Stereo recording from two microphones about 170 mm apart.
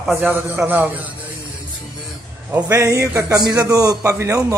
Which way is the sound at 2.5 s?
15° right (ahead or behind).